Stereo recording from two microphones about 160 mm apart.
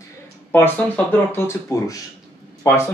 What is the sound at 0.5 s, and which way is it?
Speech, 10° left (ahead or behind).